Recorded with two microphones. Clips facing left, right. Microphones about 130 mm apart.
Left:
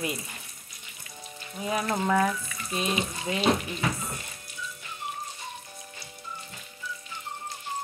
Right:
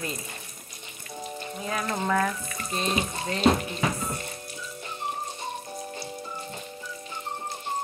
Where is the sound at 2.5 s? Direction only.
40° right (ahead or behind).